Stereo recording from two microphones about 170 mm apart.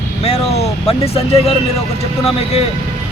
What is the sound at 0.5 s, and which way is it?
Speech, 35° left (ahead or behind).